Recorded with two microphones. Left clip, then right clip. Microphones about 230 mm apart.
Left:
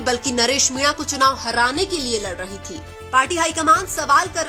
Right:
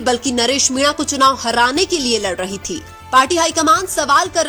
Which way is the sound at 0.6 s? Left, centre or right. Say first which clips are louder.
Right 4 dB; right.